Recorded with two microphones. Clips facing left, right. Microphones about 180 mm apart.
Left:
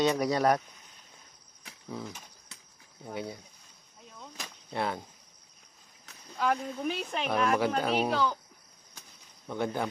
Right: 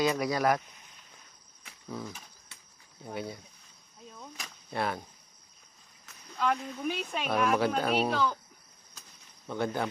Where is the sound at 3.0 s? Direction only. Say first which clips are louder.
Even; 20° left (ahead or behind).